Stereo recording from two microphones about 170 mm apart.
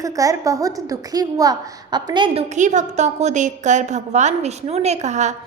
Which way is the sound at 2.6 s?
45° right (ahead or behind).